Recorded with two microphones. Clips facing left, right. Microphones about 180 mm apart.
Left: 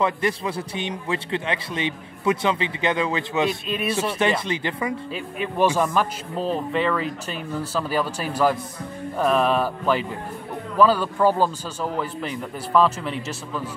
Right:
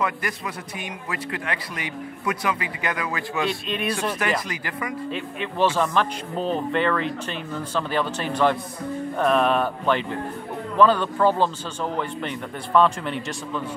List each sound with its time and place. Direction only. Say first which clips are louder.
0.0 s a man's voice: left 4 dB; 25° left (ahead or behind)
3.4 s a man's voice: left 1 dB; 5° left (ahead or behind)
4.5 s a man's voice: left 5 dB; 25° left (ahead or behind)
5.1 s speech: left 1 dB; 10° left (ahead or behind)
6.3 s a man's voice: even; centre (ahead or behind)